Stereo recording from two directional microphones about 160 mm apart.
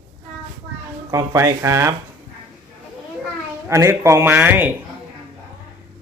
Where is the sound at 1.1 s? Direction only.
20° right (ahead or behind).